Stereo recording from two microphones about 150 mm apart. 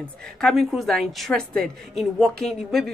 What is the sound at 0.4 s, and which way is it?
A woman's voice, 5° left (ahead or behind).